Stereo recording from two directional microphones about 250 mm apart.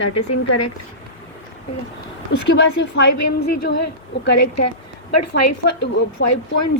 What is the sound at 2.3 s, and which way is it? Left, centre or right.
A woman's voice, left.